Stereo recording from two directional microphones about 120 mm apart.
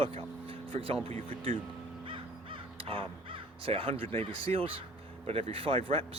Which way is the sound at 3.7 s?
50° right (ahead or behind).